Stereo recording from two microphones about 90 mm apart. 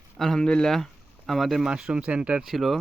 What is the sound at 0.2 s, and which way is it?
Speech, 5° left (ahead or behind).